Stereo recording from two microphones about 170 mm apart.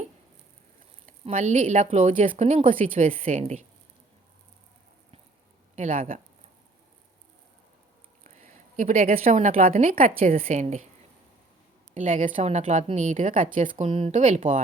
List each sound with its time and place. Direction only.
1.0 s a woman's voice: 40° right (ahead or behind)
5.7 s a woman's voice: 50° right (ahead or behind)
8.2 s a woman's voice: 45° right (ahead or behind)
10.4 s a woman's voice: 40° right (ahead or behind)
11.9 s a woman's voice: 50° right (ahead or behind)